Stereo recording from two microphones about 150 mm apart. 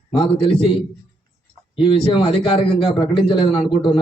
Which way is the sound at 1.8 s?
35° left (ahead or behind).